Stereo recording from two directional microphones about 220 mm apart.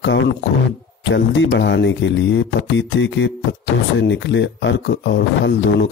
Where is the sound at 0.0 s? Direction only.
55° left (ahead or behind).